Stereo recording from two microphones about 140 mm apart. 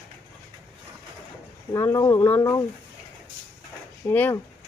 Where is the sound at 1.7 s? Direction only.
20° left (ahead or behind).